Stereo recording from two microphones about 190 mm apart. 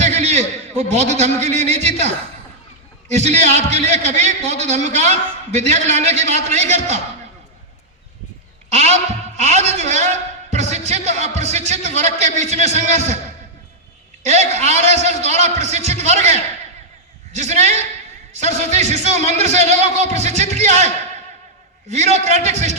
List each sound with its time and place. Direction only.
0.0 s a man's voice: 35° right (ahead or behind)
8.7 s a man's voice: 35° right (ahead or behind)
14.3 s a man's voice: 35° right (ahead or behind)